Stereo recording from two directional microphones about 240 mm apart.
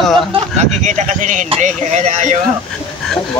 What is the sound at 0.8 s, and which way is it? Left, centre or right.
Speech, right.